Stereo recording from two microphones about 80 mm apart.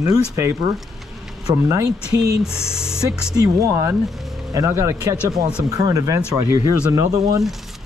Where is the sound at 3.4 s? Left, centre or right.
Right.